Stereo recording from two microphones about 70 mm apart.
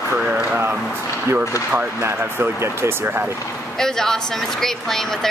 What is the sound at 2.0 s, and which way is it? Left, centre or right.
Speech, right.